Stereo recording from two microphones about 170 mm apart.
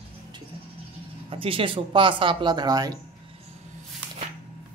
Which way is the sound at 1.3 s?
30° right (ahead or behind).